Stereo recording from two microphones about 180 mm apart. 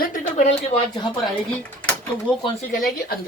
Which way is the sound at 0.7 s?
25° left (ahead or behind).